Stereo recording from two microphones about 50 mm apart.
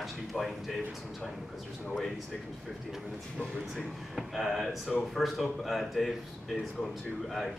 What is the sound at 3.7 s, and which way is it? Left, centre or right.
Speech, centre.